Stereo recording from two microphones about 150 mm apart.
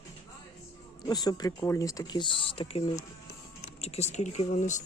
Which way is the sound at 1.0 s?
25° left (ahead or behind).